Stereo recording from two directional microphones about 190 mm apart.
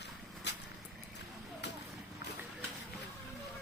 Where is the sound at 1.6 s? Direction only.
65° left (ahead or behind).